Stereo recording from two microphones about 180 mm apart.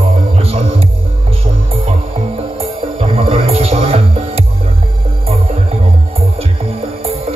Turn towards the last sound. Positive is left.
turn(degrees=-35)  # may be behind; listen again after turning